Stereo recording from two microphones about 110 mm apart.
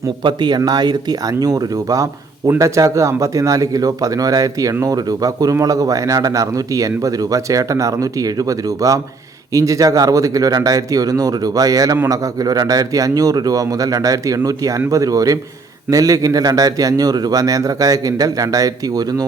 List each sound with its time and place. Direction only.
0.3 s speech: 40° right (ahead or behind)